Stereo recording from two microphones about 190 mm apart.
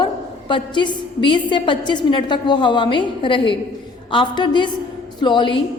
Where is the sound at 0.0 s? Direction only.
25° left (ahead or behind).